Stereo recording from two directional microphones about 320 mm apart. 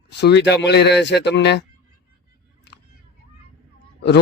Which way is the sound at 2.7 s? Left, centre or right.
Left.